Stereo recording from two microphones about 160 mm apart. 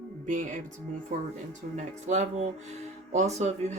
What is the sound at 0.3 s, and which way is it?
Speech, 50° right (ahead or behind).